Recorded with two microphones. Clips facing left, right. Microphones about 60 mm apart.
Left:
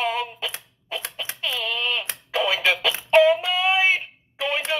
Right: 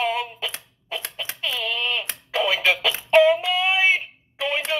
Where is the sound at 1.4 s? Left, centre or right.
Right.